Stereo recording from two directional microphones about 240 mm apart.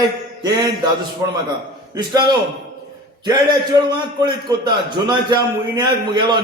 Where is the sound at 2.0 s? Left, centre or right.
Centre.